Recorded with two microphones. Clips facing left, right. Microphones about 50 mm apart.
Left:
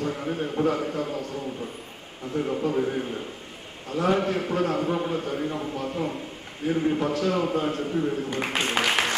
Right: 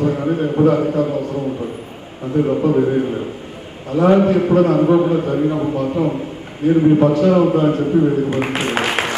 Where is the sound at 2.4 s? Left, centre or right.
Right.